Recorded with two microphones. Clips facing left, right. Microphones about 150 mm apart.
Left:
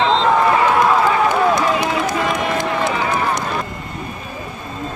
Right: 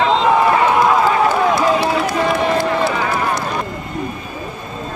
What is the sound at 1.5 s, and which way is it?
Run, 20° left (ahead or behind).